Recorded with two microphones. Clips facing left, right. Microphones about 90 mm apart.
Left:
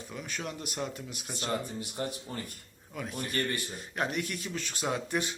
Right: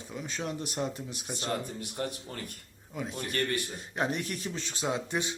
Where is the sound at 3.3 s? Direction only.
Centre (ahead or behind).